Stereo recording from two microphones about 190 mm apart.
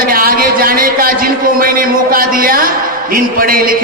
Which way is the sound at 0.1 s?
50° right (ahead or behind).